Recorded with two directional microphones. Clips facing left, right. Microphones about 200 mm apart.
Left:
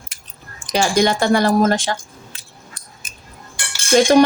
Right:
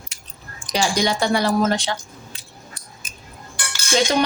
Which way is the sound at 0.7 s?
50° left (ahead or behind).